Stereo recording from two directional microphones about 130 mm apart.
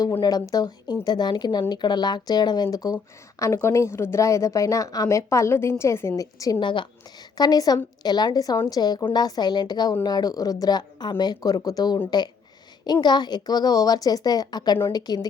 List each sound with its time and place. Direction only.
0.2 s a woman's voice: 30° left (ahead or behind)